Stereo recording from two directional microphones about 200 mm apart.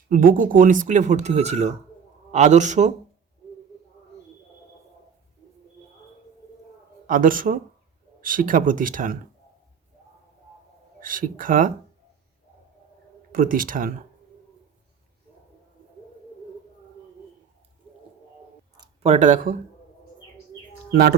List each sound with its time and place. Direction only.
0.1 s speech: 45° right (ahead or behind)
7.1 s speech: 45° right (ahead or behind)
11.0 s speech: 45° right (ahead or behind)
13.3 s speech: 45° right (ahead or behind)
19.0 s speech: 35° right (ahead or behind)
20.9 s speech: 50° right (ahead or behind)